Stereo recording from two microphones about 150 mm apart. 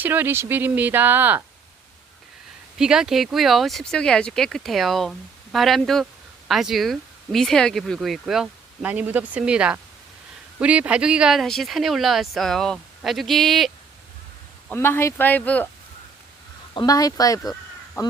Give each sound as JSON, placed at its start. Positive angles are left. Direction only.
{"t": 0.0, "sound": "speech", "side_deg": -15}
{"t": 2.7, "sound": "speech", "side_deg": -5}
{"t": 14.7, "sound": "speech", "side_deg": 15}
{"t": 16.7, "sound": "speech", "side_deg": 25}